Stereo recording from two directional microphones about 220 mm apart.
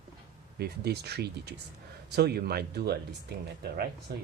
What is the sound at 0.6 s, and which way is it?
Speech, 50° right (ahead or behind).